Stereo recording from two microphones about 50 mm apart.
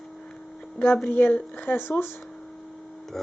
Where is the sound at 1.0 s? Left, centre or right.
Left.